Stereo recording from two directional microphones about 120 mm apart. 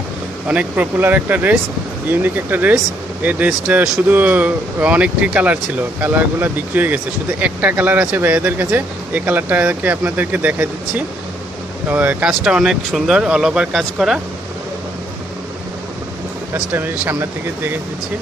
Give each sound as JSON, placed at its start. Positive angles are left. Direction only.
{"t": 0.5, "sound": "speech", "side_deg": -10}
{"t": 16.5, "sound": "speech", "side_deg": -15}